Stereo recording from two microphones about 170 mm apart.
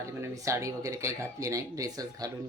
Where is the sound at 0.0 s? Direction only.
15° right (ahead or behind).